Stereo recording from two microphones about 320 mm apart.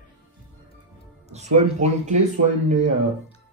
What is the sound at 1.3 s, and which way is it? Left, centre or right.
Speech, right.